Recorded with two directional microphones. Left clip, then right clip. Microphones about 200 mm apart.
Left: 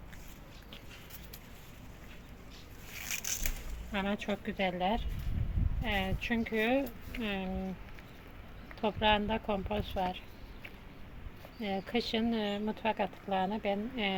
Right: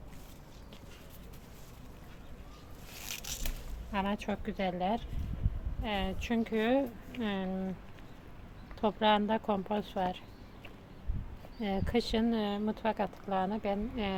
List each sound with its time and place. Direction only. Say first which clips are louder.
3.3 s a sound: left 5 dB; 25° right (ahead or behind)
3.9 s speech: even; 5° right (ahead or behind); by 7.5 s 20° right (ahead or behind)
8.8 s speech: right 1 dB; 20° right (ahead or behind)
11.6 s speech: right 1 dB; 20° right (ahead or behind)